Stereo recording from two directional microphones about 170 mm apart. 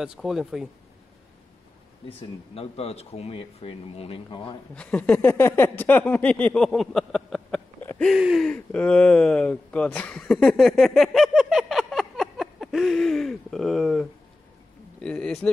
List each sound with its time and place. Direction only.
0.0 s speech: centre (ahead or behind)
2.0 s speech: 35° left (ahead or behind)
4.7 s a sound: 10° left (ahead or behind)
8.1 s speech: centre (ahead or behind)